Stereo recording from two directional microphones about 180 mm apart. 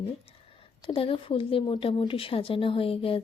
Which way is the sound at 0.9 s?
30° left (ahead or behind).